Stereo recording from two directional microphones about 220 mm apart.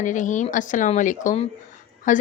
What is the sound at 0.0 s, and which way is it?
A woman's voice, 35° left (ahead or behind).